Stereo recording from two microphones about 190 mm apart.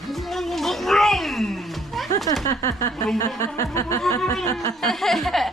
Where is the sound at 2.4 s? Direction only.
15° left (ahead or behind).